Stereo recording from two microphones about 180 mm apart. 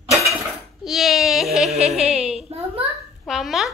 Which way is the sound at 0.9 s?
Centre (ahead or behind).